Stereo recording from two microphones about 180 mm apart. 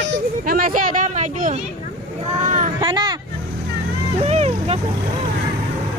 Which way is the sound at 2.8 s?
25° right (ahead or behind).